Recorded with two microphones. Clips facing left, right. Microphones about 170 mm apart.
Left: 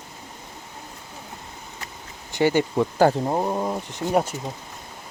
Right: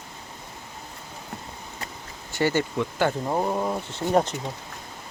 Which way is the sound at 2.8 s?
35° left (ahead or behind).